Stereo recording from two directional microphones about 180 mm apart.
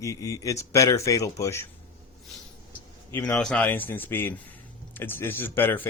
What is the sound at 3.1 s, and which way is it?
Speech, 10° left (ahead or behind).